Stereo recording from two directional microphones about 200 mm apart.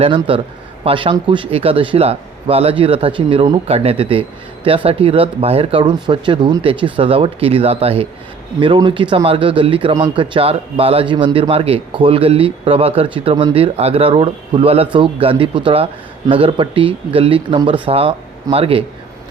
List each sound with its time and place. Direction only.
0.0 s speech: 25° right (ahead or behind)